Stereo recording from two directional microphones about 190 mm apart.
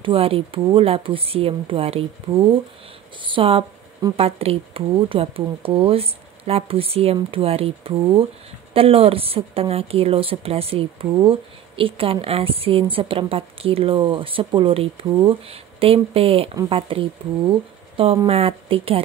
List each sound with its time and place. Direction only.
0.0 s a woman's voice: 30° right (ahead or behind)